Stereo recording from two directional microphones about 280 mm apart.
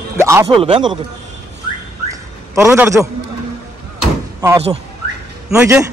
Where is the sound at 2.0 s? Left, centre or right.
Centre.